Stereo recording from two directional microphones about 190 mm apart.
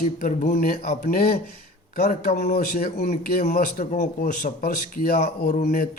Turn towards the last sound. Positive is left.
turn(degrees=40)  # may be behind; listen again after turning